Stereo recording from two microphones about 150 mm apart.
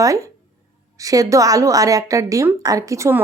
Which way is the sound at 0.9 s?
25° right (ahead or behind).